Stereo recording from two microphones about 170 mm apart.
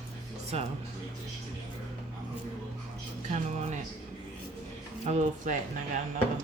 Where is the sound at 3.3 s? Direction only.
45° right (ahead or behind).